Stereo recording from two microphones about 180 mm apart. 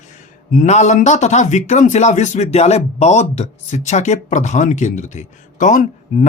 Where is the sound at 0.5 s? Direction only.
40° left (ahead or behind).